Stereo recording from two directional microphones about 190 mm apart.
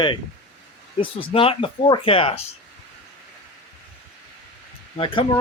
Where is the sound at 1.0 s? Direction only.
30° left (ahead or behind).